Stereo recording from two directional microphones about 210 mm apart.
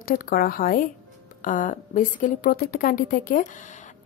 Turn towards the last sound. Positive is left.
turn(degrees=40)  # may be behind; listen again after turning